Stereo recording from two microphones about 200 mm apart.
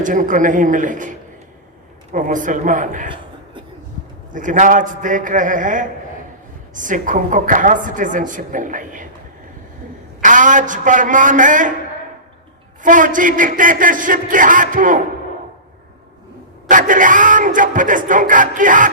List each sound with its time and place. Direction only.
0.0 s a woman's voice: 40° right (ahead or behind)
2.1 s a woman's voice: 40° right (ahead or behind)
4.3 s a woman's voice: 40° right (ahead or behind)
10.2 s a woman's voice: 40° right (ahead or behind)
12.8 s a woman's voice: 40° right (ahead or behind)
16.6 s a woman's voice: 40° right (ahead or behind)